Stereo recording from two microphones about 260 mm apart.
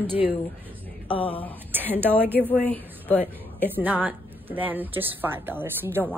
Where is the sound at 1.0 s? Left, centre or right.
Centre.